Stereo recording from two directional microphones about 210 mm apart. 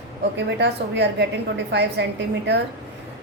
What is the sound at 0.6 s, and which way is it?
A woman's voice, 55° right (ahead or behind).